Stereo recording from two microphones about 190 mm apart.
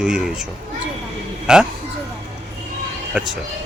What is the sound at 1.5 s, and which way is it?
Speech, 5° right (ahead or behind).